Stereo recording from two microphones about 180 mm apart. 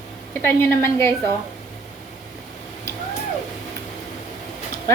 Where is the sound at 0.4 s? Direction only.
15° left (ahead or behind).